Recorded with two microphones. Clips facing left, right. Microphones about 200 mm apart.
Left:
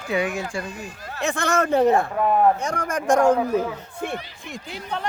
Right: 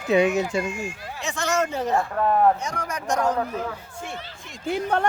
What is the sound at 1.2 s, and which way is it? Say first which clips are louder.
Speech: left 3 dB; 55° left (ahead or behind).